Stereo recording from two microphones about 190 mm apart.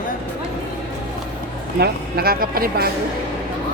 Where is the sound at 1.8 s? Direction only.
55° right (ahead or behind).